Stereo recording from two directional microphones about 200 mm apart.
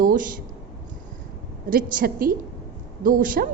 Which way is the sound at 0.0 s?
45° right (ahead or behind).